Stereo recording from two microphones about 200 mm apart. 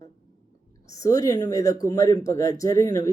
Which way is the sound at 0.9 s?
15° left (ahead or behind).